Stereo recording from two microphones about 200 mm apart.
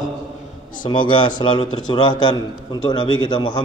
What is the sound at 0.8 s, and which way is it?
A man's voice, 25° left (ahead or behind).